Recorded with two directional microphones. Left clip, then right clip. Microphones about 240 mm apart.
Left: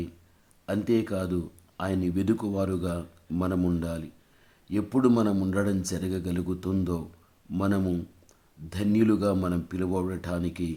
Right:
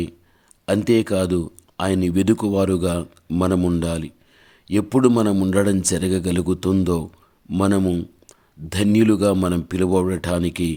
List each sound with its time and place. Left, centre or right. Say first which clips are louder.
0.6 s speech: right 9 dB; right